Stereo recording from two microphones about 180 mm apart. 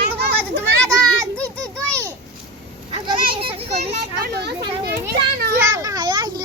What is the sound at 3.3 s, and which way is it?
Children playing, 30° right (ahead or behind).